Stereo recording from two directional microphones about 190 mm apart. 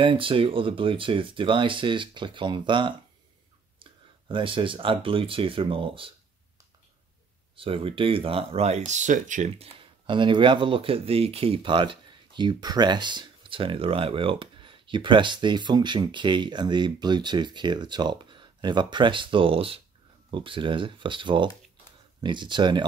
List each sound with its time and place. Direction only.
0.0 s speech: 25° right (ahead or behind)
7.5 s speech: 30° right (ahead or behind)
10.0 s speech: 25° right (ahead or behind)